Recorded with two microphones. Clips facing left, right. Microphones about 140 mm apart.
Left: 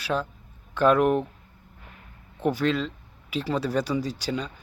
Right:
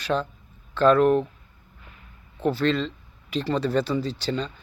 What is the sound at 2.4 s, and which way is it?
Speech, 15° left (ahead or behind).